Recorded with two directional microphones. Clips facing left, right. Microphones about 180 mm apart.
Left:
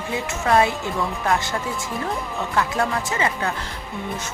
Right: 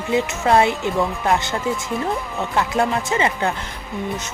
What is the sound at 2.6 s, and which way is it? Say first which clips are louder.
Speech: right 3 dB; 25° right (ahead or behind).